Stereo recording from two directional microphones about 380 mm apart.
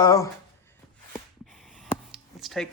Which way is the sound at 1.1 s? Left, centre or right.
Centre.